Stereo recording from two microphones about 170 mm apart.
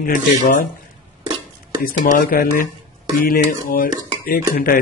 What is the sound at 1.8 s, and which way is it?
Speech, 55° left (ahead or behind).